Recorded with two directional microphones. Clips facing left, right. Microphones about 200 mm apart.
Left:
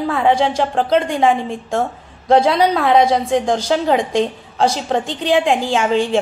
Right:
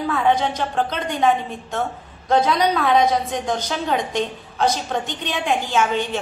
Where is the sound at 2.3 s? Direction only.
30° left (ahead or behind).